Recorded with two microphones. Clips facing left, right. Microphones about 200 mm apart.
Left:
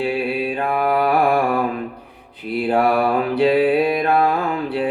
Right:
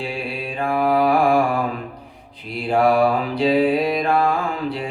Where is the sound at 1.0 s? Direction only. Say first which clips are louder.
Even; 60° left (ahead or behind).